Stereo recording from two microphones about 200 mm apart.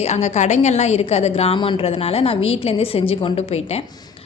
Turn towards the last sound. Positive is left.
turn(degrees=30)  # may be behind; listen again after turning